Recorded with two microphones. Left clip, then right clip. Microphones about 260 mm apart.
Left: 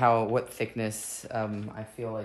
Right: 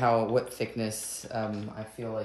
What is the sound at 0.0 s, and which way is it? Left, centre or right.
Speech, centre.